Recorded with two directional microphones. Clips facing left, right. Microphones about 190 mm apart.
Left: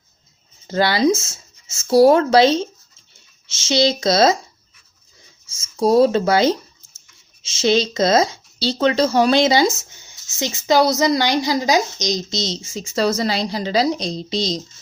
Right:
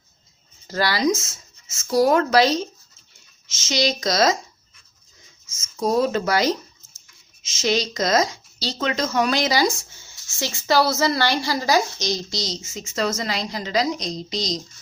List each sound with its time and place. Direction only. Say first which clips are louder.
0.7 s speech: left 4 dB; 25° left (ahead or behind)
5.5 s speech: left 6 dB; 30° left (ahead or behind)